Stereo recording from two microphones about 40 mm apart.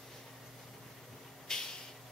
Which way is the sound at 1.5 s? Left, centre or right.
Centre.